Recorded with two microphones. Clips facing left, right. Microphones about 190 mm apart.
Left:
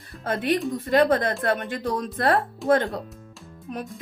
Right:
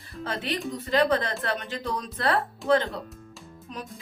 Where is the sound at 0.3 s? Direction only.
50° left (ahead or behind).